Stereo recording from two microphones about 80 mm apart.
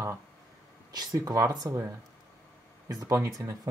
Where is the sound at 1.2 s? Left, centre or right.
Right.